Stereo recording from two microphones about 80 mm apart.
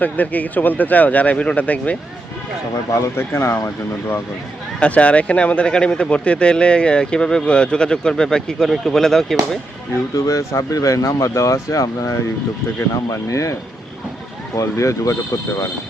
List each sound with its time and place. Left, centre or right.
0.0 s speech: centre
2.9 s speech: left
4.8 s speech: centre
10.2 s speech: left